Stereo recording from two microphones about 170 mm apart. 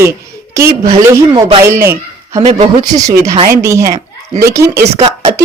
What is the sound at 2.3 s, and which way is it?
Speech, 40° right (ahead or behind).